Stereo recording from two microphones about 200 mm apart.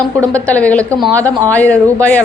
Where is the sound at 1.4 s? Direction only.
10° left (ahead or behind).